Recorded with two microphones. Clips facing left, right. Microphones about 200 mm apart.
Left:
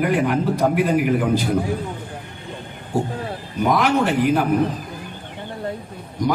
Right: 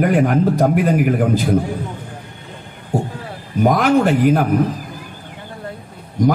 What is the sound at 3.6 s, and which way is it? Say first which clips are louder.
Speech: right 4 dB; 45° right (ahead or behind).